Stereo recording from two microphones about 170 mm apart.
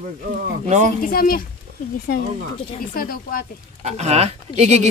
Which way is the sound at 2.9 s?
60° left (ahead or behind).